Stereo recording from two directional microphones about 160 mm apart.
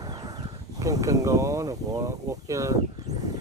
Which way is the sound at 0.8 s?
20° right (ahead or behind).